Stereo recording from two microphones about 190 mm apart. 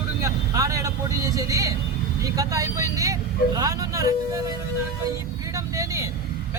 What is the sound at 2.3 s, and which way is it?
Speech, 15° right (ahead or behind).